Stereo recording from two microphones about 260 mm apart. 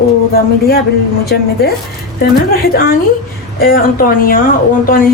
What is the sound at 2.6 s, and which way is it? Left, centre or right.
A woman's voice, left.